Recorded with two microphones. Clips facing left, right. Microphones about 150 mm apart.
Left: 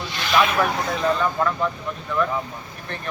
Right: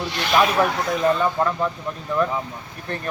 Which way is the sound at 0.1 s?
60° right (ahead or behind).